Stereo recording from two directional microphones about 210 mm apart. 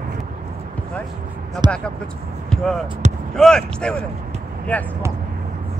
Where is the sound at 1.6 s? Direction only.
20° right (ahead or behind).